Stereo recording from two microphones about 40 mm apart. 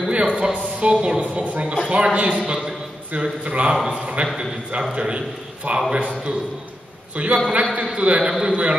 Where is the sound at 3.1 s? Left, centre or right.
Right.